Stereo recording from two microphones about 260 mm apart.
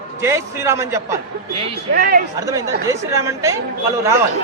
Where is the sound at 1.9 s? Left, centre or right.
Right.